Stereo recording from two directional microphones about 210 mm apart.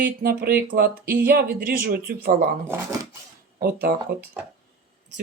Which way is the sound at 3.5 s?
40° right (ahead or behind).